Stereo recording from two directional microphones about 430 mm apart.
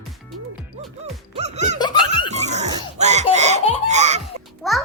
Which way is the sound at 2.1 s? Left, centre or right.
Centre.